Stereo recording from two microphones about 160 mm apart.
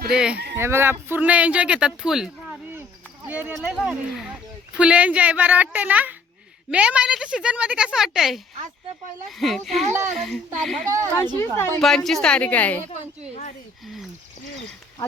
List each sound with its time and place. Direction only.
0.1 s a woman's voice: 5° right (ahead or behind)
0.5 s speech: 15° right (ahead or behind)
9.4 s a woman's voice: centre (ahead or behind)
10.8 s speech: 20° right (ahead or behind)
11.3 s speech: 15° left (ahead or behind)
11.8 s a woman's voice: centre (ahead or behind)